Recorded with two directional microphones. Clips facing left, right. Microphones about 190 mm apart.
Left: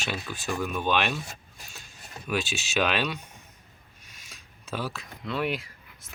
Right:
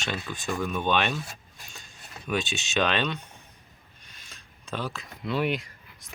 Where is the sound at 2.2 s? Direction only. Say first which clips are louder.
Right 1 dB; centre (ahead or behind).